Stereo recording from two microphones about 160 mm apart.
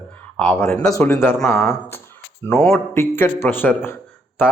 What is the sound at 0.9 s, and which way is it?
A man's voice, 15° left (ahead or behind).